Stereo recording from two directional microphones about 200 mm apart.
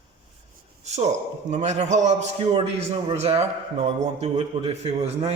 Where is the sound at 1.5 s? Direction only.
35° right (ahead or behind).